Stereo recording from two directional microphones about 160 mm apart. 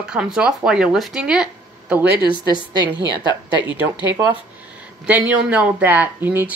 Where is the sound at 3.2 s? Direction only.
30° left (ahead or behind).